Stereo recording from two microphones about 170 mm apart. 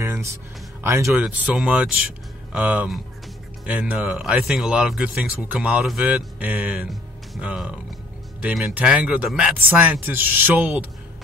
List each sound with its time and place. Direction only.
0.0 s music: 15° right (ahead or behind)
0.8 s speech: 15° right (ahead or behind)